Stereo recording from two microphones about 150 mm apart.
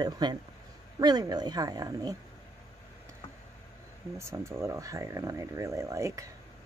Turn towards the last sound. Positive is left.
turn(degrees=-20)  # may be behind; listen again after turning